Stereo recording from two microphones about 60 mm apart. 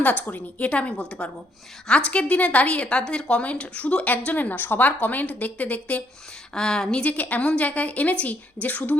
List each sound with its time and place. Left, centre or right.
0.0 s a woman's voice: left
6.5 s speech: centre
7.0 s a woman's voice: left